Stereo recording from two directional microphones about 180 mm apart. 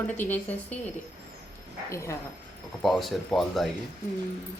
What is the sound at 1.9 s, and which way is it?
Speech, 15° left (ahead or behind).